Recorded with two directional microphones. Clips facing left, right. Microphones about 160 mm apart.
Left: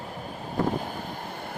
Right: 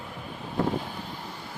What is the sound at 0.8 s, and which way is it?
Wind, 50° left (ahead or behind).